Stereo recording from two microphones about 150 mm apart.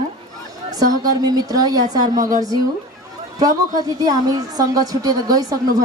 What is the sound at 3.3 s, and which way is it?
A woman's voice, 25° right (ahead or behind).